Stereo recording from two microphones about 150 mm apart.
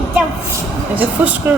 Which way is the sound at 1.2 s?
10° right (ahead or behind).